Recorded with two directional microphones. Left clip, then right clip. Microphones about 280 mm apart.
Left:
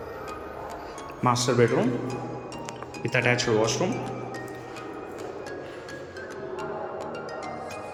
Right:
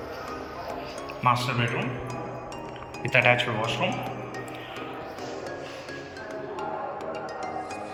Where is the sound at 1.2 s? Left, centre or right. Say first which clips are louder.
Left 2 dB; centre.